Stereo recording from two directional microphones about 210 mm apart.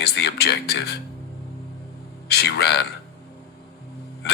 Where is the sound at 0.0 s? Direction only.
50° left (ahead or behind).